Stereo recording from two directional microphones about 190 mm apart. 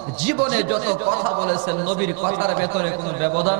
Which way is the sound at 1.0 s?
35° right (ahead or behind).